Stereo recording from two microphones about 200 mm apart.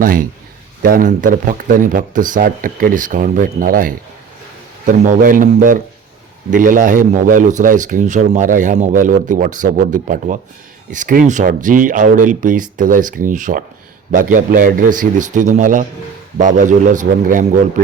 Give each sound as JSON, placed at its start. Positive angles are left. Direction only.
{"t": 0.0, "sound": "speech", "side_deg": -45}